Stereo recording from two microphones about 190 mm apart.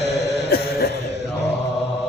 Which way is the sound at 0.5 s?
55° left (ahead or behind).